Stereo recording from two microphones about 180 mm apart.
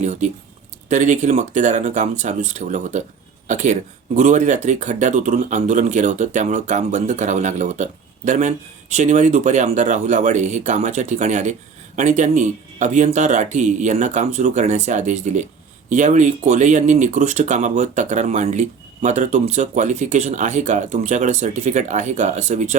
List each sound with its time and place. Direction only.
0.0 s speech: 40° right (ahead or behind)